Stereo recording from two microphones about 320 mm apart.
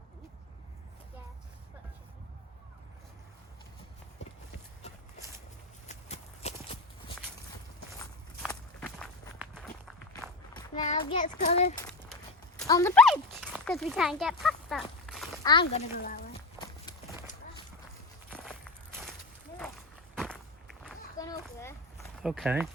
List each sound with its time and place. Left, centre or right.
5.9 s clip-clop: centre
8.4 s walk: centre
10.5 s child singing: centre
12.5 s horse: centre
15.4 s a child's voice: centre
18.3 s walk: centre
20.1 s walk: centre
20.8 s a sound: centre